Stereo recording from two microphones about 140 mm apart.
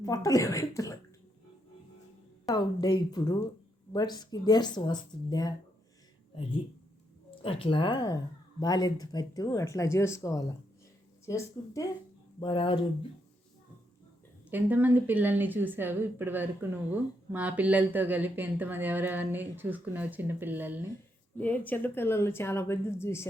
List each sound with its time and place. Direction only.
0.0 s speech: 25° left (ahead or behind)
2.5 s speech: 30° left (ahead or behind)
7.4 s speech: 40° left (ahead or behind); by 11.9 s 20° left (ahead or behind)
12.4 s speech: 40° left (ahead or behind)
14.5 s speech: 10° right (ahead or behind)
21.3 s speech: 10° left (ahead or behind)